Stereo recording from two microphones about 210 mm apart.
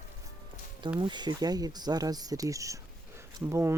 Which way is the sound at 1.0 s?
20° right (ahead or behind).